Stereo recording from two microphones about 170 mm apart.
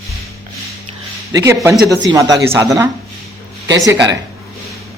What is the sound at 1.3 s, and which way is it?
Speech, 20° right (ahead or behind).